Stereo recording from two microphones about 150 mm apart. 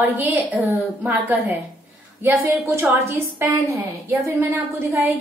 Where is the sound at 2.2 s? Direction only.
15° right (ahead or behind).